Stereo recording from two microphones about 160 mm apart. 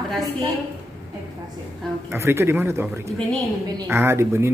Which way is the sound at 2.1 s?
15° right (ahead or behind).